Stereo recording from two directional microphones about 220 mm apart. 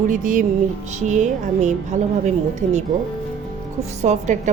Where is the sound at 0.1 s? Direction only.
35° right (ahead or behind).